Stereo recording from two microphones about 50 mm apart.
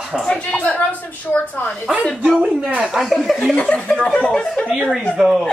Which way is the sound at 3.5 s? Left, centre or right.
Left.